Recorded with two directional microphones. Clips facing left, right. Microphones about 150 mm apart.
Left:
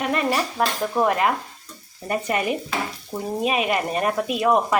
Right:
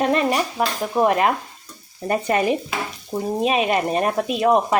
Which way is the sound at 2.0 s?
30° right (ahead or behind).